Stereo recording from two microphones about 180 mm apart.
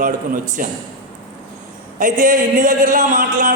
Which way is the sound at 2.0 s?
45° right (ahead or behind).